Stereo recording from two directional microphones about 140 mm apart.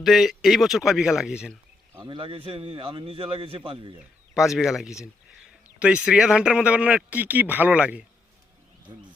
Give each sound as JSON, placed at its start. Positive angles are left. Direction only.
{"t": 0.0, "sound": "speech", "side_deg": 0}
{"t": 2.0, "sound": "a man's voice", "side_deg": -40}
{"t": 4.4, "sound": "speech", "side_deg": -5}
{"t": 8.9, "sound": "speech", "side_deg": -30}